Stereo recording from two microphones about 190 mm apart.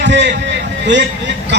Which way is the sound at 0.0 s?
65° right (ahead or behind).